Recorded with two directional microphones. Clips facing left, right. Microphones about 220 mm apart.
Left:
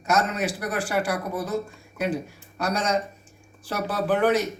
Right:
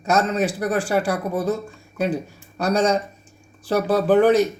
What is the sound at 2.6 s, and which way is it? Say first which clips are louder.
Speech: right 6 dB; 30° right (ahead or behind).